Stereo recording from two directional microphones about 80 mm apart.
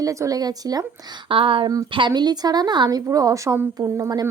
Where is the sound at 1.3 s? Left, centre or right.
Right.